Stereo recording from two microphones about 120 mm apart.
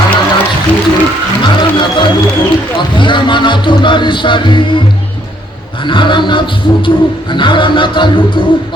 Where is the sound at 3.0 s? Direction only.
40° left (ahead or behind).